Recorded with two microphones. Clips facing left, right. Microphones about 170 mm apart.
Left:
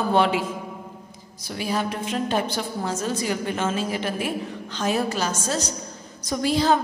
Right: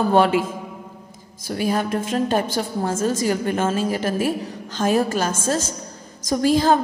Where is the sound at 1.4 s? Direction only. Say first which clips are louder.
Right 4 dB; 45° right (ahead or behind).